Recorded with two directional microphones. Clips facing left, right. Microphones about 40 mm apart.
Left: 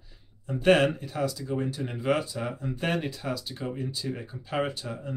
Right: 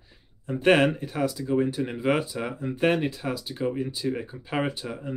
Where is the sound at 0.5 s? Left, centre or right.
Centre.